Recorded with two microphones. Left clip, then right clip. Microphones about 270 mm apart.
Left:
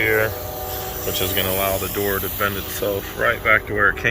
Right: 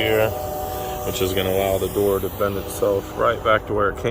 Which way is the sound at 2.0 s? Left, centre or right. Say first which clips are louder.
Right 2 dB; centre.